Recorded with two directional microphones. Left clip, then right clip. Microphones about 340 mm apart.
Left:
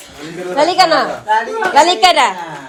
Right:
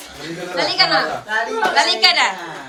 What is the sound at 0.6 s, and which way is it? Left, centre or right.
A woman's voice, centre.